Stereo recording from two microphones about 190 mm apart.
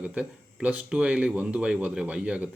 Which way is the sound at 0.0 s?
5° right (ahead or behind).